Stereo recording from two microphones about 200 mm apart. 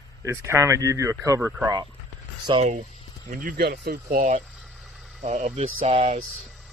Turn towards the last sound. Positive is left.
turn(degrees=-30)  # may be behind; listen again after turning